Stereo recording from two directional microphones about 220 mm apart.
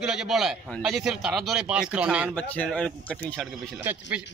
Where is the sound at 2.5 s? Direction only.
5° left (ahead or behind).